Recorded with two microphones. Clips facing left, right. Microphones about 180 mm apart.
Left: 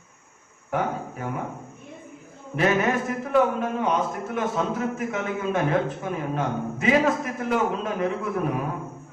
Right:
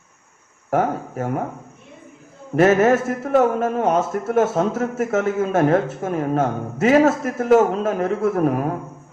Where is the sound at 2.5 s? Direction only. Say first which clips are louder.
Right 8 dB; 45° right (ahead or behind).